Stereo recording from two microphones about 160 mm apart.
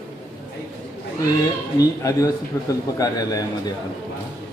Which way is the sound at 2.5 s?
20° left (ahead or behind).